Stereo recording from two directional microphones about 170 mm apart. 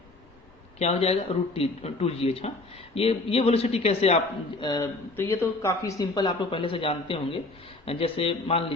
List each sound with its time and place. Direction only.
0.8 s speech: 40° left (ahead or behind)
4.6 s speech: 25° left (ahead or behind)